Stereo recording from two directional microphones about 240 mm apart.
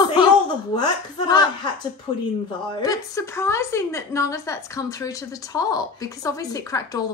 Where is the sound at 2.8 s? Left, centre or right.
Centre.